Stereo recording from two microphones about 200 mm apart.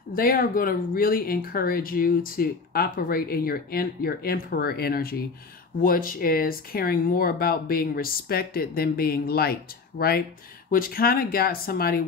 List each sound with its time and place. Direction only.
0.1 s speech: 45° left (ahead or behind)